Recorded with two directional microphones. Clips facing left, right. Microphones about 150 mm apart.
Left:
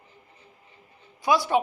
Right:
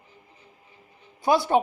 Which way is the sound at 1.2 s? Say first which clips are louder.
Right 2 dB; 50° right (ahead or behind).